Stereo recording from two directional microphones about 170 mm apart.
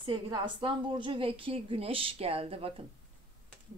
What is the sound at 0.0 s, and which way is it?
Speech, 30° right (ahead or behind).